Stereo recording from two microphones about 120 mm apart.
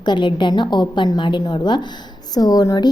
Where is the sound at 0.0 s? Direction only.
40° left (ahead or behind).